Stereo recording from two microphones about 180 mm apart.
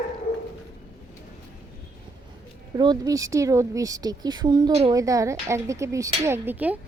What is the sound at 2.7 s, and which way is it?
A woman's voice, 20° right (ahead or behind).